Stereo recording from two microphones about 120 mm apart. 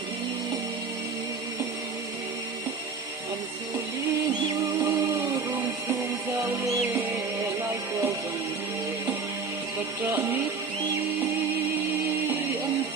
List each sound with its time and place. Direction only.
4.8 s music: 30° right (ahead or behind)
10.1 s music: 20° right (ahead or behind)